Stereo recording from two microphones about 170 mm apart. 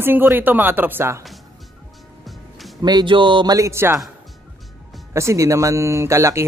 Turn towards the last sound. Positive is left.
turn(degrees=-15)  # may be behind; listen again after turning